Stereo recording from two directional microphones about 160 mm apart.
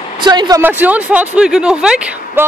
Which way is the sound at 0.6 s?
10° right (ahead or behind).